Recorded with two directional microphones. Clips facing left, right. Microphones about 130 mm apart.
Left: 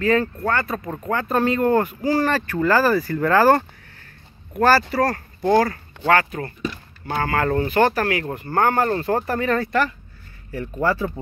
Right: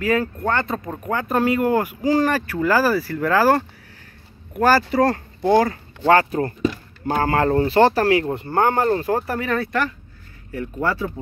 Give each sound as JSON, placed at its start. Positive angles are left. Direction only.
{"t": 0.0, "sound": "speech", "side_deg": -10}
{"t": 4.6, "sound": "speech", "side_deg": -15}